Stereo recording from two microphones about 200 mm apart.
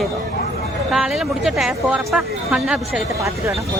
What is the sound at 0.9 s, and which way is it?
Speech, centre (ahead or behind).